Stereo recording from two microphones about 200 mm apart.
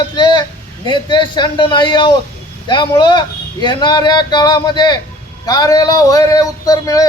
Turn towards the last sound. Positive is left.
turn(degrees=15)  # may be behind; listen again after turning